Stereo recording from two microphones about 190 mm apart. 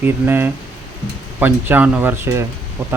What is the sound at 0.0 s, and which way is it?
Speech, 10° right (ahead or behind).